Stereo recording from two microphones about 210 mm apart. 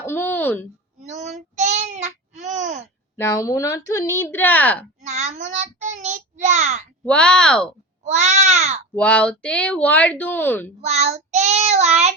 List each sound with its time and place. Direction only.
0.0 s speech: 10° left (ahead or behind)
0.9 s child singing: 35° right (ahead or behind)
3.2 s speech: 15° left (ahead or behind)
5.0 s child singing: 30° right (ahead or behind)
7.0 s speech: 5° left (ahead or behind)
8.0 s child singing: 30° right (ahead or behind)
9.0 s speech: 5° left (ahead or behind)
10.8 s child singing: 30° right (ahead or behind)